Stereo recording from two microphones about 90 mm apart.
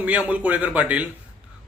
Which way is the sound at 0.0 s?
15° right (ahead or behind).